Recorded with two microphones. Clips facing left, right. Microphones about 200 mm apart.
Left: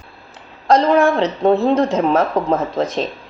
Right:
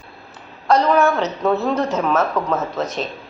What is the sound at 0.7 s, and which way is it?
A woman's voice, 30° left (ahead or behind).